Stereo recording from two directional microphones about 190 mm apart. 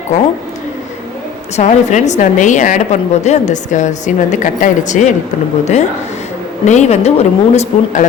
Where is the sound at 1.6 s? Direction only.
35° left (ahead or behind).